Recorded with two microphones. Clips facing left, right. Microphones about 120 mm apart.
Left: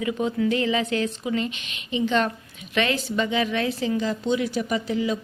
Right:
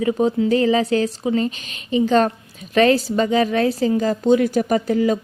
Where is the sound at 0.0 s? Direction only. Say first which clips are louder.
Right 6 dB; 35° right (ahead or behind).